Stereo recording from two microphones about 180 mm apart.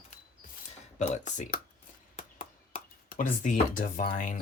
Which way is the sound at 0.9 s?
40° left (ahead or behind).